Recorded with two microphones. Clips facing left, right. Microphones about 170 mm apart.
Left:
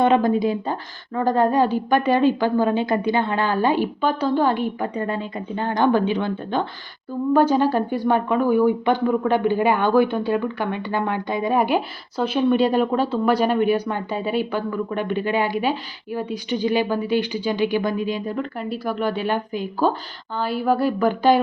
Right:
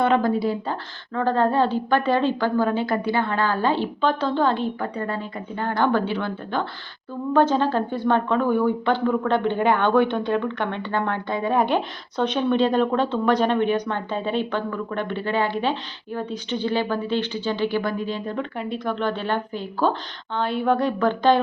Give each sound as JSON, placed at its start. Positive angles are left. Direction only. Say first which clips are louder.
{"t": 0.0, "sound": "speech", "louder": "left 3 dB", "side_deg": 20}
{"t": 18.3, "sound": "speech", "louder": "left 1 dB", "side_deg": 5}